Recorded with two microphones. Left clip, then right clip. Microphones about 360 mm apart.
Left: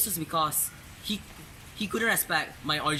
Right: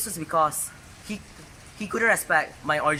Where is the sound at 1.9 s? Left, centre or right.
Centre.